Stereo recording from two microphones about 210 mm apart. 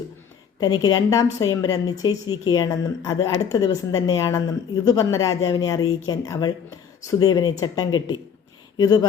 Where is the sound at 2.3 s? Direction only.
80° left.